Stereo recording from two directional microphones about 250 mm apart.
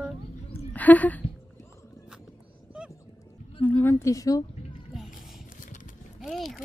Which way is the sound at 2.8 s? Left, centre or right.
Centre.